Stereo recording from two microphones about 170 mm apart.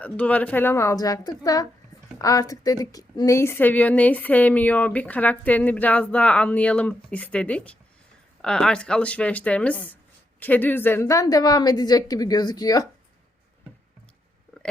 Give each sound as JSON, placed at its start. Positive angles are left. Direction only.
{"t": 0.0, "sound": "a woman's voice", "side_deg": 10}